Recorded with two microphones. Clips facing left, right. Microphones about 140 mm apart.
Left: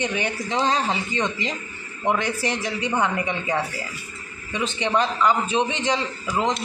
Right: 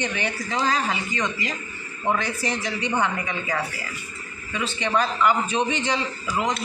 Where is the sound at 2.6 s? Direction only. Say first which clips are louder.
Even; 10° left (ahead or behind).